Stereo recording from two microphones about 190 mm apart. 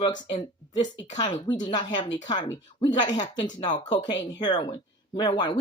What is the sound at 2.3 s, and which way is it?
Speech, 20° left (ahead or behind).